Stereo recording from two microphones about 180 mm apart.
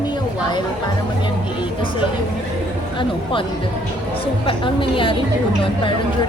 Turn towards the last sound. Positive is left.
turn(degrees=30)  # may be behind; listen again after turning